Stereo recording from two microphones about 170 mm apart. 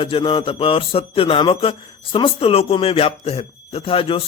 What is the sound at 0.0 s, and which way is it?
Speech, 30° left (ahead or behind).